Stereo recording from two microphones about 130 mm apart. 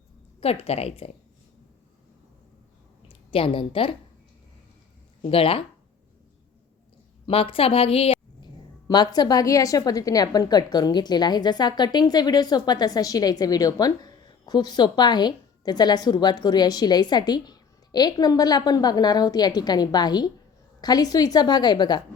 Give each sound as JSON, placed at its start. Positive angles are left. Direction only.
{"t": 0.3, "sound": "a woman's voice", "side_deg": 50}
{"t": 3.1, "sound": "a woman's voice", "side_deg": 45}
{"t": 5.2, "sound": "a woman's voice", "side_deg": 45}
{"t": 7.3, "sound": "a woman's voice", "side_deg": 45}
{"t": 8.9, "sound": "a woman's voice", "side_deg": 30}